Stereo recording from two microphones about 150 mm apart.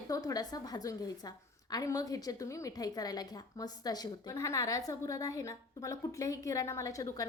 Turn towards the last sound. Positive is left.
turn(degrees=25)  # may be behind; listen again after turning